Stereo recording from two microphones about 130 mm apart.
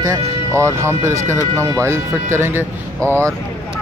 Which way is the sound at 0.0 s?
25° right (ahead or behind).